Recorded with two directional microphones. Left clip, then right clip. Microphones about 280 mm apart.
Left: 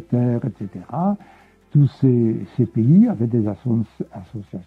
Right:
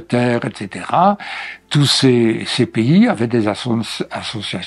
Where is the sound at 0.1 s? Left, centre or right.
Centre.